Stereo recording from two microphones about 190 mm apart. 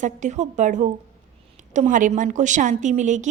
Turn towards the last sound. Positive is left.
turn(degrees=-40)  # may be behind; listen again after turning